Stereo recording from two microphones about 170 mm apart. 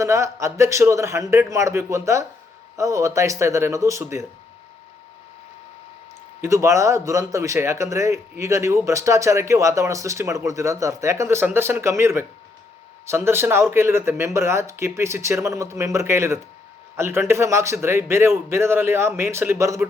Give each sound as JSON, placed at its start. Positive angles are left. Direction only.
{"t": 0.0, "sound": "speech", "side_deg": -15}
{"t": 6.4, "sound": "speech", "side_deg": -15}